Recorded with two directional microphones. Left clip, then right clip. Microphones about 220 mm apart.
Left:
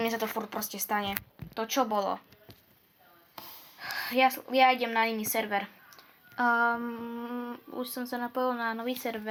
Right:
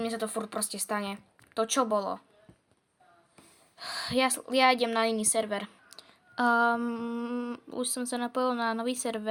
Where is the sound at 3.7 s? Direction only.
55° right (ahead or behind).